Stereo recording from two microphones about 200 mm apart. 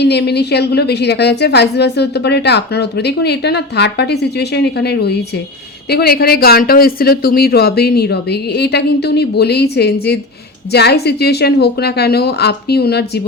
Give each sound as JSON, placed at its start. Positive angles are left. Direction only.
{"t": 0.0, "sound": "a woman's voice", "side_deg": 55}